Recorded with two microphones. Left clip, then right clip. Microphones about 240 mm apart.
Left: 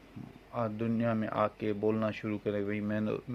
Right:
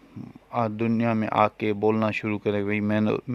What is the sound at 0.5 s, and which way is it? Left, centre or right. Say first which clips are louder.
Speech: right 8 dB; right.